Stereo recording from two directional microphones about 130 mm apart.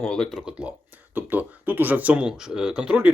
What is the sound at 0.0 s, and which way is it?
Speech, 5° left (ahead or behind).